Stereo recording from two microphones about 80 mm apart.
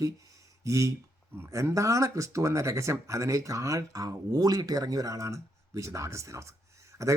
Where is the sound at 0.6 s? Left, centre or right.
Right.